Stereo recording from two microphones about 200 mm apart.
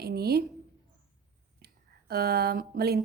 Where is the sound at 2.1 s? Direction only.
50° right (ahead or behind).